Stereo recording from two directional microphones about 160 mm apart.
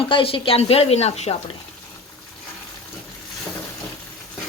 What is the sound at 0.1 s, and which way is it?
A woman's voice, 35° left (ahead or behind).